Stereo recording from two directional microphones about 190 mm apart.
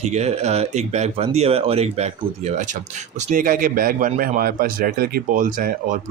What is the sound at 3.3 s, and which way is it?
A man's voice, 45° right (ahead or behind).